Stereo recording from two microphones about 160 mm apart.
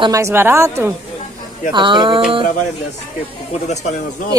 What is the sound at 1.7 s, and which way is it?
Speech, 30° right (ahead or behind).